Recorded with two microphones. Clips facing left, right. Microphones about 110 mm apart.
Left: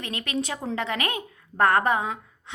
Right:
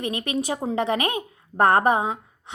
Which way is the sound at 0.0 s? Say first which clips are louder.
Right 4 dB; 20° right (ahead or behind).